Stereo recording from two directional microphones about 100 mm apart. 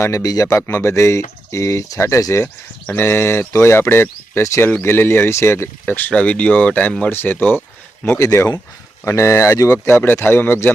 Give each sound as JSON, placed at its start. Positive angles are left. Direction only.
{"t": 0.0, "sound": "a man's voice", "side_deg": 35}
{"t": 0.7, "sound": "speech", "side_deg": 25}
{"t": 5.8, "sound": "speech", "side_deg": 15}